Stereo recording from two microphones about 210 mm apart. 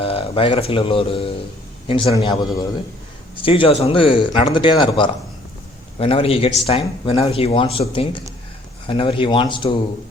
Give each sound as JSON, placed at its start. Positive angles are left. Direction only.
{"t": 0.0, "sound": "a man's voice", "side_deg": 25}